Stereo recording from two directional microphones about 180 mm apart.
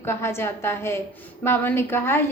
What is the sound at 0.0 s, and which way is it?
A woman's voice, 15° left (ahead or behind).